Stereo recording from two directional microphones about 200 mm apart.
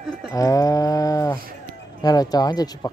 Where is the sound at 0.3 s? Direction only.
15° left (ahead or behind).